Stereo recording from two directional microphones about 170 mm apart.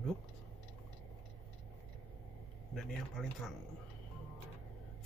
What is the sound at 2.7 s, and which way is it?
Speech, centre (ahead or behind).